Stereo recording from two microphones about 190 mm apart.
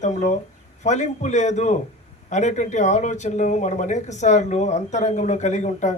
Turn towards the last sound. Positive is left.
turn(degrees=40)  # may be behind; listen again after turning